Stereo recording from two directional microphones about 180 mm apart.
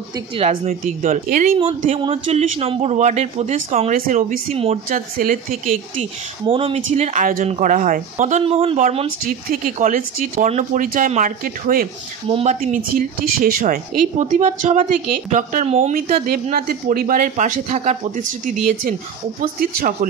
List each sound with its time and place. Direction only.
0.1 s a man's voice: 30° right (ahead or behind); by 1.5 s 45° right (ahead or behind)
1.6 s a man's voice: 35° right (ahead or behind); by 5.8 s 50° right (ahead or behind)
5.9 s a man's voice: 30° right (ahead or behind)
6.9 s a man's voice: 40° right (ahead or behind)
12.3 s speech: 35° right (ahead or behind)